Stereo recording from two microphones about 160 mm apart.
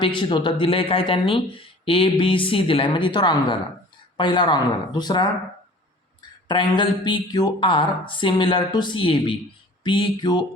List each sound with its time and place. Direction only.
0.0 s speech: 30° left (ahead or behind)
6.5 s speech: 30° left (ahead or behind)